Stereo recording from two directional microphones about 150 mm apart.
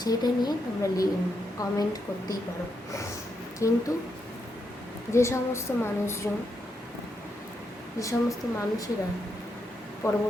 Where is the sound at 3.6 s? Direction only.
20° left (ahead or behind).